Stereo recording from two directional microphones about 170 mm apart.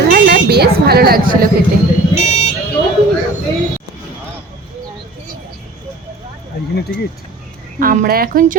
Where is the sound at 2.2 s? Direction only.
45° left (ahead or behind).